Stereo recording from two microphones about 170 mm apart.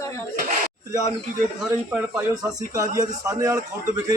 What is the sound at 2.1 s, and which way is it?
Speech, 20° right (ahead or behind).